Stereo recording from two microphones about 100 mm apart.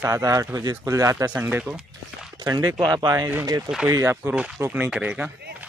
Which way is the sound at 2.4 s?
40° right (ahead or behind).